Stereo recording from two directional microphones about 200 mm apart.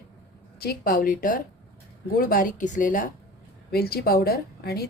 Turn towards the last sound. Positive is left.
turn(degrees=50)  # may be behind; listen again after turning